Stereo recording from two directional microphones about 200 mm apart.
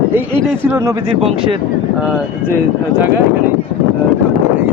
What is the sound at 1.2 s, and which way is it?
Speech, 30° right (ahead or behind).